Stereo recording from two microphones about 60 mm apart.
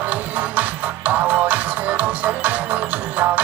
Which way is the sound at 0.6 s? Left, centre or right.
Right.